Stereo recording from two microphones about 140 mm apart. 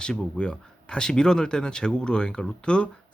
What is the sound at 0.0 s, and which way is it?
Speech, 5° left (ahead or behind).